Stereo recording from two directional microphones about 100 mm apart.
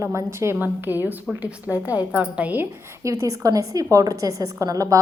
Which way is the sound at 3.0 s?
30° right (ahead or behind).